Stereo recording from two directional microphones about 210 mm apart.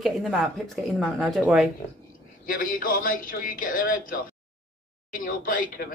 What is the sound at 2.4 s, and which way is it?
Speech, 40° left (ahead or behind).